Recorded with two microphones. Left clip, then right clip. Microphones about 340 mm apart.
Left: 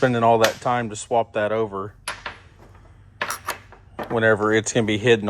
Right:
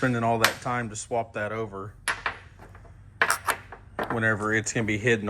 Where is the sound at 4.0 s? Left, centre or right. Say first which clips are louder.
Left 7 dB; centre.